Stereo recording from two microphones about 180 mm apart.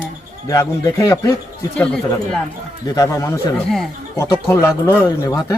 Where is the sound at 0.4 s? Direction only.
20° left (ahead or behind).